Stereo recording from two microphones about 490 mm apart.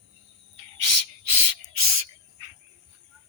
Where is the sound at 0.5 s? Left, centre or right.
Right.